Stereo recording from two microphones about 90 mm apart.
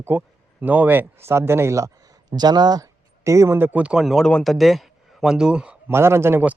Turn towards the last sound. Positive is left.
turn(degrees=-25)  # may be behind; listen again after turning